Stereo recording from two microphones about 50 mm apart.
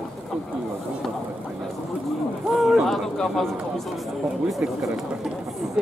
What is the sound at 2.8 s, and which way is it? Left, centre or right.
Speech, centre.